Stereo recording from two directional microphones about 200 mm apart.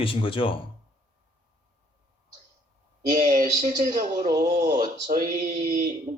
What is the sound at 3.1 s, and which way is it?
Speech, 40° right (ahead or behind).